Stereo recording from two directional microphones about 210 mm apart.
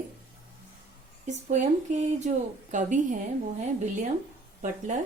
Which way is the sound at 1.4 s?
35° right (ahead or behind).